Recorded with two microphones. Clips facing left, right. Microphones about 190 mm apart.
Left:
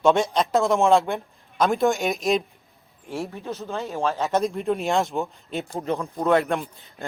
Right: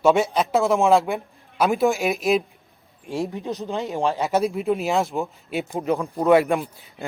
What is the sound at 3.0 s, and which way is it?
A man's voice, 15° right (ahead or behind).